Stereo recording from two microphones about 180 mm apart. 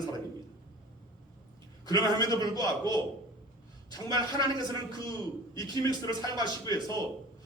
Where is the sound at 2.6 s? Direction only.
20° left (ahead or behind).